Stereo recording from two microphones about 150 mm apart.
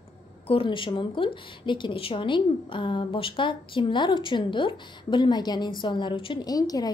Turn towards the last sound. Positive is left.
turn(degrees=25)  # may be behind; listen again after turning